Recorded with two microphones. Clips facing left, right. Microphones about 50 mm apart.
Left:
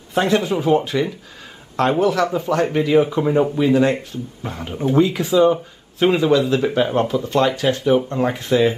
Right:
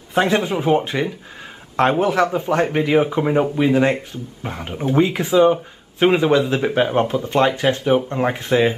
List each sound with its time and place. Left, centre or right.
0.1 s speech: centre